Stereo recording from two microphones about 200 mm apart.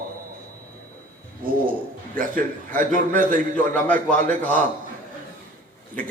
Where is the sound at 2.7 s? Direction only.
40° right (ahead or behind).